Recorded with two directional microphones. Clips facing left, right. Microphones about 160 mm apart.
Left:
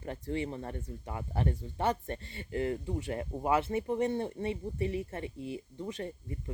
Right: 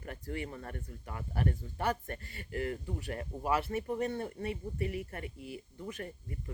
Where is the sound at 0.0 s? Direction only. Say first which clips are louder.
Left 5 dB; 25° left (ahead or behind).